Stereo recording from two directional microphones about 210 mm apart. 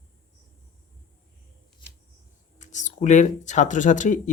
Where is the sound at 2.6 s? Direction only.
35° left (ahead or behind).